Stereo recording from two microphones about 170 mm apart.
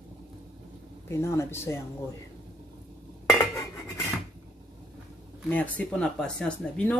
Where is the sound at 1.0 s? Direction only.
15° left (ahead or behind).